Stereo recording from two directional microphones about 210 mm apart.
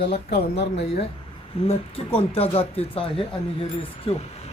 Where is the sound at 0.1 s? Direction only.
25° left (ahead or behind).